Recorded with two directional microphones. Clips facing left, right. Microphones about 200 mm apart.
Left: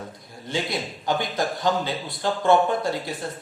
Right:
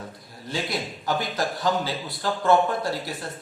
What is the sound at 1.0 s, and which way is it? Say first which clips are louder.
Speech: left 2 dB; 20° left (ahead or behind).